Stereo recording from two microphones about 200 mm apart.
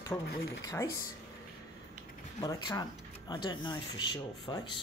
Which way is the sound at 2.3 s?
20° left (ahead or behind).